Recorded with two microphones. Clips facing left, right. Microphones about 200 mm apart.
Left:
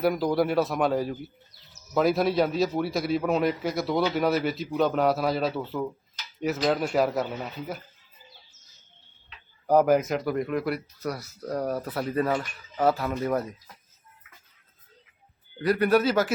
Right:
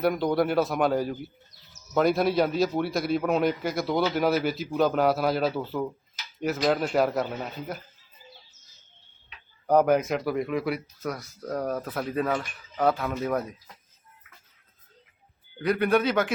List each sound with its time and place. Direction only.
0.0 s a man's voice: centre (ahead or behind)
9.6 s a man's voice: centre (ahead or behind)
15.5 s a man's voice: 5° left (ahead or behind)